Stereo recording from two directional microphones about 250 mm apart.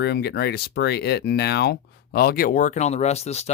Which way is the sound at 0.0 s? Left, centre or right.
Left.